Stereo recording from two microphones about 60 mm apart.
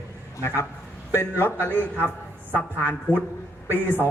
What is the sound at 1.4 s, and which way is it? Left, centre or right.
Speech, left.